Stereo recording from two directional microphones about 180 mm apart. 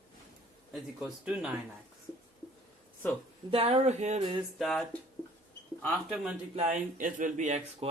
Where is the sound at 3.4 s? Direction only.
30° right (ahead or behind).